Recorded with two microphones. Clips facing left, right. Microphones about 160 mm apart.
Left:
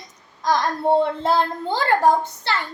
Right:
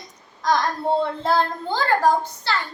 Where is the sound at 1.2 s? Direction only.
25° left (ahead or behind).